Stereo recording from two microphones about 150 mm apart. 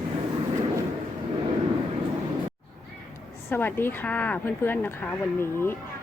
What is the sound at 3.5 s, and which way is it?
Speech, 15° left (ahead or behind).